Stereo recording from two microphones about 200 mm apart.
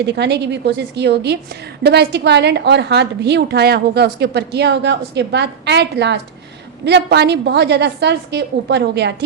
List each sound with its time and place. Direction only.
0.0 s a woman's voice: 55° right (ahead or behind)